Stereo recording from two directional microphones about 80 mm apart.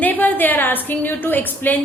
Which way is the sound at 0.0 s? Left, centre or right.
Left.